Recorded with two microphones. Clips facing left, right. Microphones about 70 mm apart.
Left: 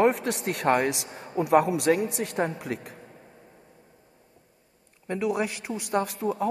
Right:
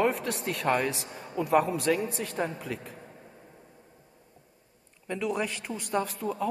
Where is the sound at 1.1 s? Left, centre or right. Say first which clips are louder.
Left 4 dB; left.